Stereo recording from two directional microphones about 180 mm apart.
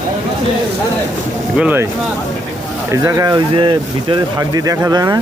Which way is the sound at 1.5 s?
10° right (ahead or behind).